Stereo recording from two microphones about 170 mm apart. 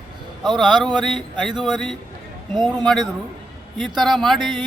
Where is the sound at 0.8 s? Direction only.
25° right (ahead or behind).